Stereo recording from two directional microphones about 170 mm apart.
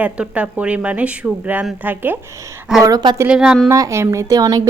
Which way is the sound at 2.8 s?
25° right (ahead or behind).